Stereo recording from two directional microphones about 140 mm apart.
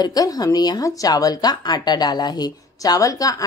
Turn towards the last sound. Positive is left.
turn(degrees=25)  # may be behind; listen again after turning